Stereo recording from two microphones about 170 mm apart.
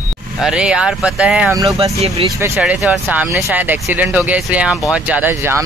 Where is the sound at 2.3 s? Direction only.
15° right (ahead or behind).